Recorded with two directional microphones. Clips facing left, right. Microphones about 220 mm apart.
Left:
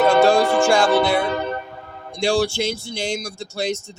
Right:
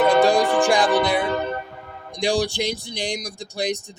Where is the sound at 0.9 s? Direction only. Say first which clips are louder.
Left 2 dB; 15° right (ahead or behind).